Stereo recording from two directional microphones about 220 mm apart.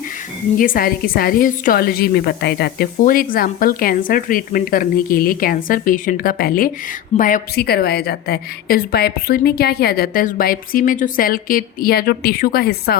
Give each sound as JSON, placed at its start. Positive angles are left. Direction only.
{"t": 0.5, "sound": "a woman's voice", "side_deg": 40}